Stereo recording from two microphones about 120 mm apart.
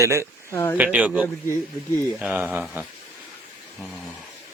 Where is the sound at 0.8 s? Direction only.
10° right (ahead or behind).